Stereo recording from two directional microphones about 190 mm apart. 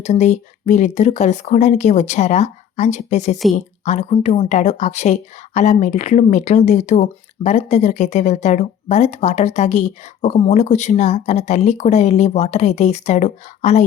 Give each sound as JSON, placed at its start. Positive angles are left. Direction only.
{"t": 0.0, "sound": "speech", "side_deg": 40}